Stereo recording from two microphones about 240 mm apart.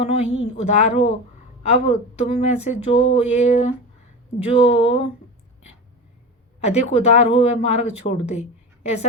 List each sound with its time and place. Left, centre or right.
0.0 s speech: left
6.6 s speech: left